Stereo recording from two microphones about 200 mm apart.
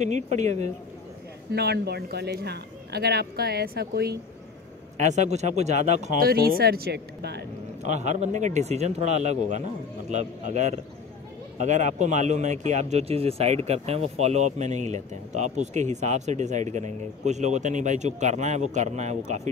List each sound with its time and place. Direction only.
0.4 s speech: 35° right (ahead or behind)
1.5 s speech: 55° right (ahead or behind)
4.9 s speech: 35° right (ahead or behind)
6.2 s speech: 50° right (ahead or behind)
7.8 s speech: 35° right (ahead or behind)